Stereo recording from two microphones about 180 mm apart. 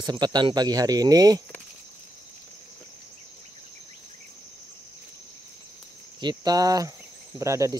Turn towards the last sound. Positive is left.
turn(degrees=-15)  # may be behind; listen again after turning